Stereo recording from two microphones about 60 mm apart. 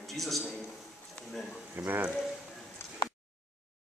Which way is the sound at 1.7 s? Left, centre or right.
Right.